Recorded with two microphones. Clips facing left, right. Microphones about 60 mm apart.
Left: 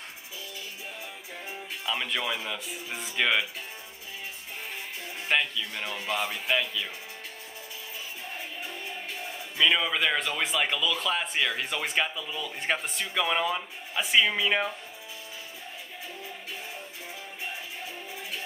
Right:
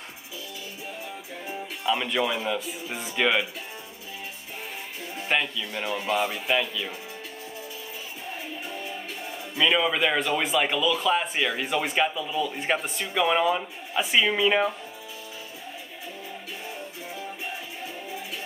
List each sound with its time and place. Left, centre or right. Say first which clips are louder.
1.9 s speech: right 5 dB; centre
5.3 s speech: right 1 dB; centre
9.6 s speech: right 2 dB; centre